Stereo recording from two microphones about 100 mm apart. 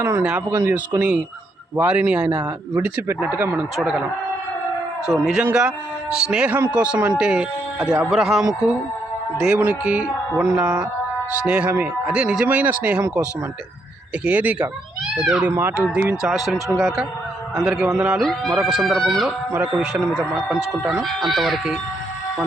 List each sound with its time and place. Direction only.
0.0 s speech: 25° right (ahead or behind)
5.1 s speech: 5° right (ahead or behind)
14.3 s speech: 15° right (ahead or behind)
16.2 s speech: centre (ahead or behind)